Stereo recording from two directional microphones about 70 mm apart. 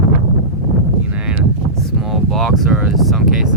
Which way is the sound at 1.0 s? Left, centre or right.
Centre.